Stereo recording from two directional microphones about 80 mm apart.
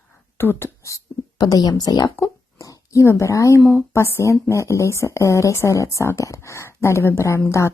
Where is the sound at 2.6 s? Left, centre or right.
Left.